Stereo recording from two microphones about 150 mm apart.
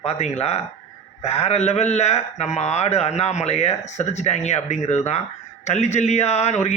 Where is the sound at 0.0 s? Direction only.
45° left (ahead or behind).